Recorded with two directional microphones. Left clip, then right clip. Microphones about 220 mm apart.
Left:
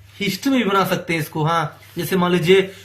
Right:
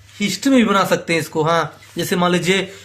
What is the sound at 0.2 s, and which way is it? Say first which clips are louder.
Speech: right 4 dB; 45° right (ahead or behind).